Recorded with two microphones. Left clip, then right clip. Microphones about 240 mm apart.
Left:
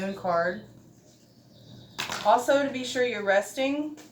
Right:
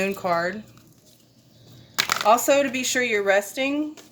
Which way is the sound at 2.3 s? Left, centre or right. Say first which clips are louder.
Right 3 dB; right.